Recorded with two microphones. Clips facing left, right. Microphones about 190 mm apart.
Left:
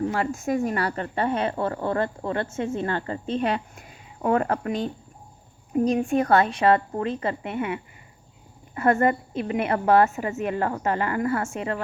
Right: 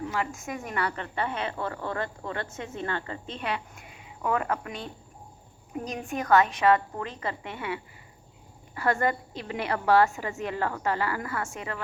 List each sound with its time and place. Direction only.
0.0 s a woman's voice: 40° left (ahead or behind)